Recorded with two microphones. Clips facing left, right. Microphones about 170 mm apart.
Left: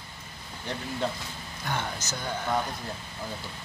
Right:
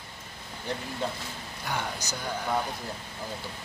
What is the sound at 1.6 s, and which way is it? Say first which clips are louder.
Speech: left 1 dB; 10° right (ahead or behind).